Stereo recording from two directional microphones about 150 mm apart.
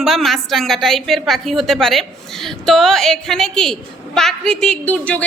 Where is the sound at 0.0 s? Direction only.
Centre (ahead or behind).